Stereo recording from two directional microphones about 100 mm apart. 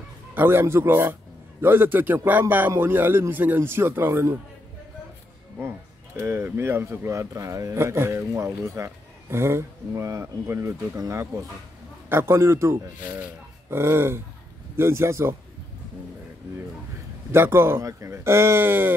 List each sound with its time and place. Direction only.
0.3 s a man's voice: 20° right (ahead or behind)
6.2 s a man's voice: 25° right (ahead or behind)
17.3 s a man's voice: 25° right (ahead or behind)